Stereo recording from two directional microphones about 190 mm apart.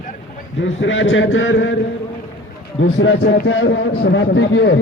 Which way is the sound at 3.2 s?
70° left (ahead or behind).